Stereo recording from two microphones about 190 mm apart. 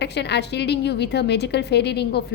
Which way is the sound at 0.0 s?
60° left (ahead or behind).